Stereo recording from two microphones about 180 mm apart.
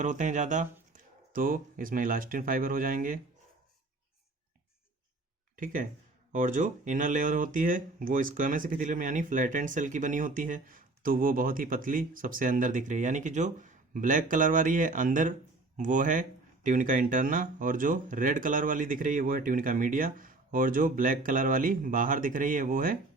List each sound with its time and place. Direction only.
0.0 s speech: 45° right (ahead or behind)
5.5 s speech: 50° right (ahead or behind)